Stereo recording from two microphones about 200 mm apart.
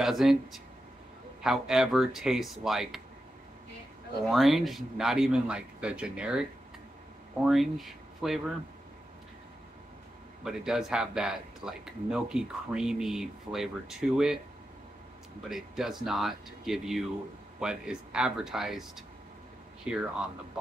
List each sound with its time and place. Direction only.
0.0 s speech: centre (ahead or behind)
4.3 s speech: centre (ahead or behind)
7.4 s speech: centre (ahead or behind)
10.4 s speech: centre (ahead or behind)
15.5 s speech: centre (ahead or behind)